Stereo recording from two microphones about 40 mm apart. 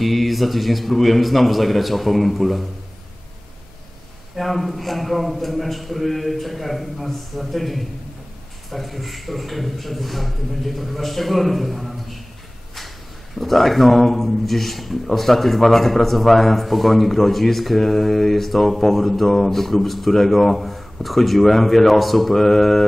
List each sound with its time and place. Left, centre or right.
0.0 s a man's voice: centre
4.4 s a man's voice: centre
13.4 s a man's voice: centre